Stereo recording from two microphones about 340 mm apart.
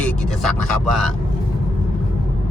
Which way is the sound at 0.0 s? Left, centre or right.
Centre.